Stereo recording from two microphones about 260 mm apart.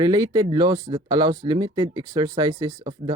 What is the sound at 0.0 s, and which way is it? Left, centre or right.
Speech, centre.